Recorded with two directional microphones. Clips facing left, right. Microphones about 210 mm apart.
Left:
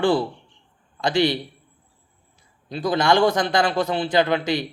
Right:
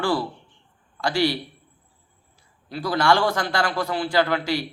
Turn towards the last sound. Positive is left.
turn(degrees=20)  # may be behind; listen again after turning